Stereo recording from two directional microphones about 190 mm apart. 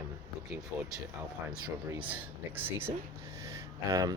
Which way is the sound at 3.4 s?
15° right (ahead or behind).